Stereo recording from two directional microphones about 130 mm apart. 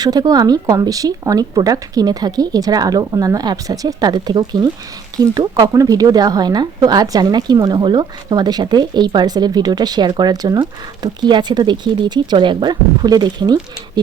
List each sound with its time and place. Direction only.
0.0 s speech: 30° right (ahead or behind)